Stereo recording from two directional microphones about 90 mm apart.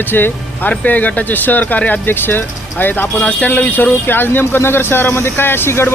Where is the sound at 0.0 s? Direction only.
20° left (ahead or behind).